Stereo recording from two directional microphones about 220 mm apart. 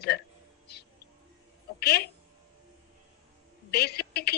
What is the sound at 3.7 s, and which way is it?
Speech, 45° left (ahead or behind).